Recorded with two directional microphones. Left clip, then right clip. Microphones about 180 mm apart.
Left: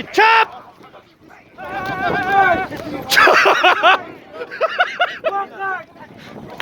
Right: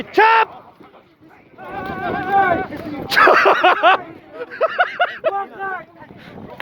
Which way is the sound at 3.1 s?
15° left (ahead or behind).